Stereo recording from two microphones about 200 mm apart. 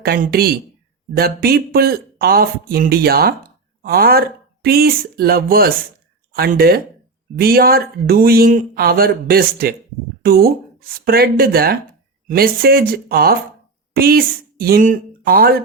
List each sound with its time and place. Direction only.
0.0 s speech: 50° right (ahead or behind)